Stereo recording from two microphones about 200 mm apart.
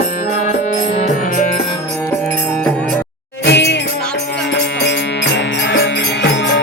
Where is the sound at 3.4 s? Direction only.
60° left (ahead or behind).